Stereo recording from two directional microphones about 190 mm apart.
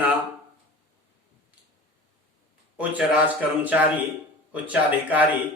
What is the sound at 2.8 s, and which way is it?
Speech, 10° right (ahead or behind).